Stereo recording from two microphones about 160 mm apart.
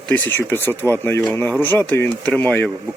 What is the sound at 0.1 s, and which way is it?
Speech, 10° left (ahead or behind).